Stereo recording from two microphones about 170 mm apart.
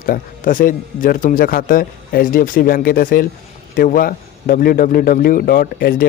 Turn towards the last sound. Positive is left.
turn(degrees=60)  # may be behind; listen again after turning